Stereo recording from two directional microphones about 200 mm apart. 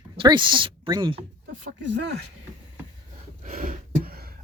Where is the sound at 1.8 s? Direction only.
65° right (ahead or behind).